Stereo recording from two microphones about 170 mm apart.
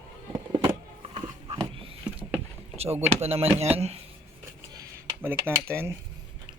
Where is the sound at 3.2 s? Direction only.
35° right (ahead or behind).